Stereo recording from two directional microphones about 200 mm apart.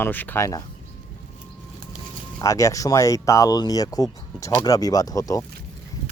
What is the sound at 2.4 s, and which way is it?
Speech, 15° left (ahead or behind).